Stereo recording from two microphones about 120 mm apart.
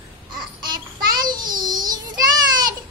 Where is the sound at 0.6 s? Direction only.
35° right (ahead or behind).